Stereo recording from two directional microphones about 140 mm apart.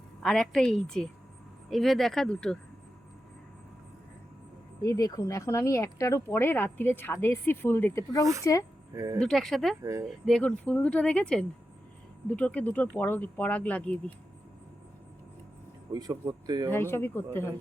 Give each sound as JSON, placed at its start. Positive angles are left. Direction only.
{"t": 0.2, "sound": "a woman's voice", "side_deg": 5}
{"t": 4.8, "sound": "speech", "side_deg": 25}
{"t": 8.2, "sound": "speech", "side_deg": -20}
{"t": 9.1, "sound": "a woman's voice", "side_deg": 5}
{"t": 9.8, "sound": "speech", "side_deg": -20}
{"t": 10.1, "sound": "speech", "side_deg": 5}
{"t": 15.9, "sound": "speech", "side_deg": -25}
{"t": 16.7, "sound": "speech", "side_deg": 15}